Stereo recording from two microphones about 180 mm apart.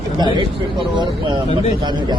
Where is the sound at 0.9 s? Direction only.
25° right (ahead or behind).